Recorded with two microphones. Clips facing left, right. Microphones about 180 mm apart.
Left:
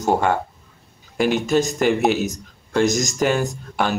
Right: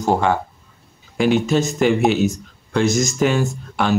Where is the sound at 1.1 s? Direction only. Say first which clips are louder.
Right 2 dB; 45° left (ahead or behind).